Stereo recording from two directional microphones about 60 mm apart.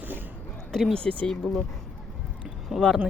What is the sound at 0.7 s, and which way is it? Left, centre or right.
Speech, centre.